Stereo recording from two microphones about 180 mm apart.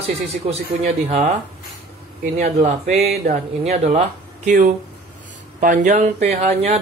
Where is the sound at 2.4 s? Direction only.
40° right (ahead or behind).